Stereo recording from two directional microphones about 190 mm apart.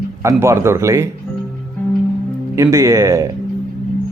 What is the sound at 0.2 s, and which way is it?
Speech, 15° right (ahead or behind).